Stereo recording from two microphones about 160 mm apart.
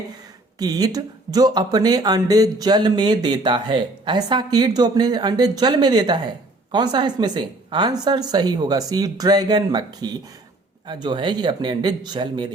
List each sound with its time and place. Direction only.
0.6 s speech: 25° right (ahead or behind)